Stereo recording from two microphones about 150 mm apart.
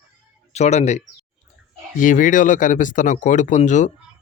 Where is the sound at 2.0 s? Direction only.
60° left (ahead or behind).